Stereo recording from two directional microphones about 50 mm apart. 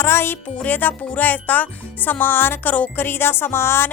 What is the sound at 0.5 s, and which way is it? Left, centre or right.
Speech, left.